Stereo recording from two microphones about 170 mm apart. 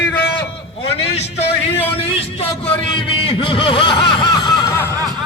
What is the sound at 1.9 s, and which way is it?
Speech, 35° left (ahead or behind).